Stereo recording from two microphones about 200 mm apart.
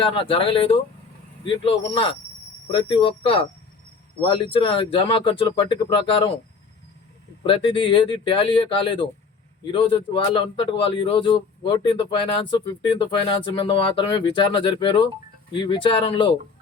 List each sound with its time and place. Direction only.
0.0 s a man's voice: 25° left (ahead or behind)
7.4 s a man's voice: 25° left (ahead or behind)